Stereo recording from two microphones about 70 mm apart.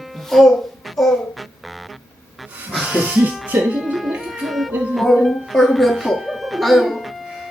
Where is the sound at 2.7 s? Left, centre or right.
Centre.